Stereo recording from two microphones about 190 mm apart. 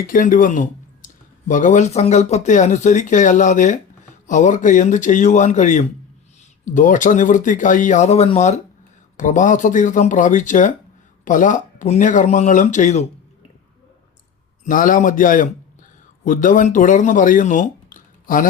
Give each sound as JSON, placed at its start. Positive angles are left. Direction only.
{"t": 0.1, "sound": "speech", "side_deg": 45}
{"t": 14.6, "sound": "a man's voice", "side_deg": 45}